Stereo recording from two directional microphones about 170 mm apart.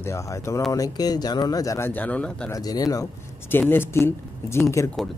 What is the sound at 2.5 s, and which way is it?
Speech, 20° left (ahead or behind).